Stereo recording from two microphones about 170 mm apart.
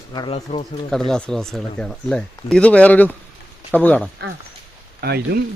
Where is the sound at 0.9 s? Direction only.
5° left (ahead or behind).